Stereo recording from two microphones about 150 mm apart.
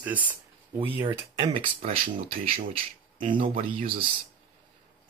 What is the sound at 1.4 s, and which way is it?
Speech, 35° right (ahead or behind).